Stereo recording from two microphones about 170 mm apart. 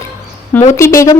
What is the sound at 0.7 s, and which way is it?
Speech, 15° left (ahead or behind).